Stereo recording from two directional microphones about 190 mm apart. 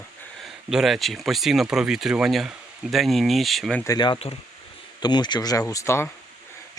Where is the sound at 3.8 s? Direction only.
20° left (ahead or behind).